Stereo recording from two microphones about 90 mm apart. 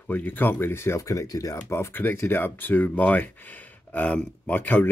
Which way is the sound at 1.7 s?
25° left (ahead or behind).